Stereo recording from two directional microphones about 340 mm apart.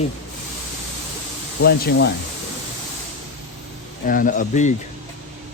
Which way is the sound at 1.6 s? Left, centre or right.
Left.